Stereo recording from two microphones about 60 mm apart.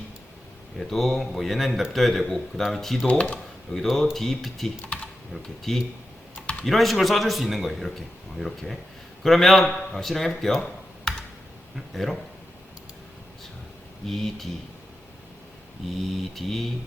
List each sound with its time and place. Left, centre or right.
0.8 s a man's voice: centre
3.1 s speech: left
3.8 s a man's voice: centre
14.1 s a man's voice: centre
15.9 s a man's voice: centre